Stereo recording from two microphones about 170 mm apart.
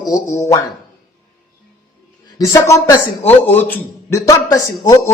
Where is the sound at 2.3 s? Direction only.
20° left (ahead or behind).